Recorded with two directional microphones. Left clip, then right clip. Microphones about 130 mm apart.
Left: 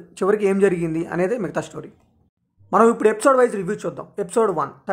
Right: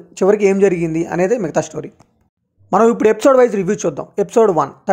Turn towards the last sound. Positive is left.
turn(degrees=-35)  # may be behind; listen again after turning